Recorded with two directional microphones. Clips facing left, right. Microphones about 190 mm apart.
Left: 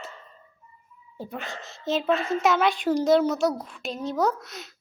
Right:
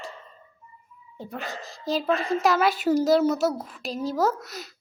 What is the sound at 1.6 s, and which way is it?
Speech, 35° right (ahead or behind).